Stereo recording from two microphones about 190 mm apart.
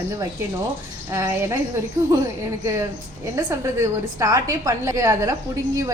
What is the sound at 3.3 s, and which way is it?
A woman's voice, 15° right (ahead or behind).